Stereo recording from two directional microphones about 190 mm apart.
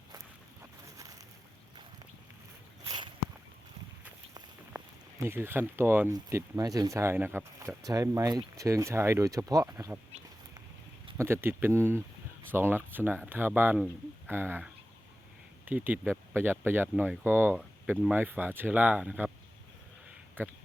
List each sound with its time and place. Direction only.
2.8 s walk: 25° right (ahead or behind)
5.2 s speech: 10° right (ahead or behind)
11.2 s speech: 10° right (ahead or behind)
20.4 s speech: 10° right (ahead or behind)